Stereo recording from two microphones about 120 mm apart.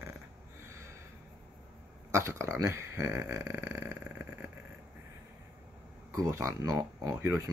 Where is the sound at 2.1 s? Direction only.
25° right (ahead or behind).